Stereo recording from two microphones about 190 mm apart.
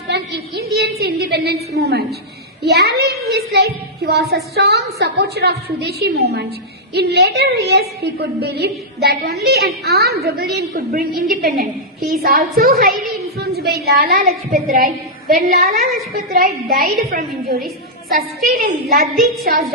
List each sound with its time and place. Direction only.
0.1 s a sound: 60° right (ahead or behind)
4.5 s a woman's voice: 60° right (ahead or behind)
13.1 s a sound: 55° right (ahead or behind)
14.3 s a woman's voice: 45° right (ahead or behind)
18.4 s a woman's voice: 50° right (ahead or behind)
19.1 s a woman's voice: centre (ahead or behind)